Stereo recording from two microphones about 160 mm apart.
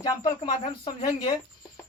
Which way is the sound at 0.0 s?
25° left (ahead or behind).